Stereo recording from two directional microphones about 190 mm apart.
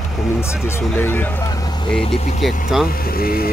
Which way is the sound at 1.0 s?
10° left (ahead or behind).